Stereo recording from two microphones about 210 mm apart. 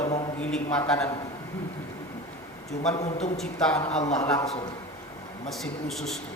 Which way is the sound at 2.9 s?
30° left (ahead or behind).